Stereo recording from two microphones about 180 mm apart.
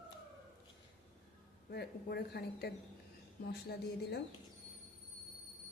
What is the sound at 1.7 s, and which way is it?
A woman's voice, 65° left (ahead or behind).